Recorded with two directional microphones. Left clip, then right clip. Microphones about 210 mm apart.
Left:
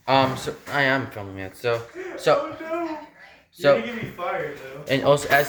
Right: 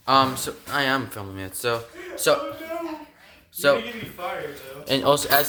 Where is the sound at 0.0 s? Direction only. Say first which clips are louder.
Right 1 dB; 20° right (ahead or behind).